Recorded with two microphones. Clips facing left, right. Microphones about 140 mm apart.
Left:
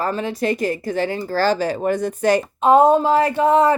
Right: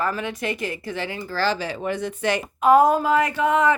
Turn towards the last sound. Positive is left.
turn(degrees=35)  # may be behind; listen again after turning